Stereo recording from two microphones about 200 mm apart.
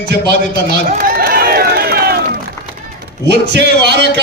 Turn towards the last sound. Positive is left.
turn(degrees=-55)  # may be behind; listen again after turning